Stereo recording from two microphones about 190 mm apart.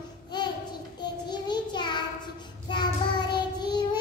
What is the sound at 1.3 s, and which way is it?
Child singing, 25° left (ahead or behind).